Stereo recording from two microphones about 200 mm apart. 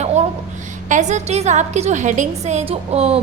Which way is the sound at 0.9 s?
40° right (ahead or behind).